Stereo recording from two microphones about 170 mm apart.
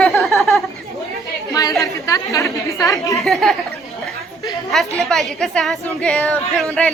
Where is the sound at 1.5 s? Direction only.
20° left (ahead or behind).